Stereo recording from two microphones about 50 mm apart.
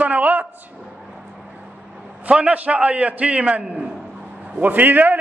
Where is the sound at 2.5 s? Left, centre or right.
Right.